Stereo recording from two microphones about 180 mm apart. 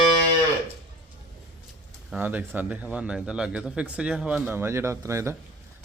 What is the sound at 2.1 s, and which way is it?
Speech, 10° right (ahead or behind).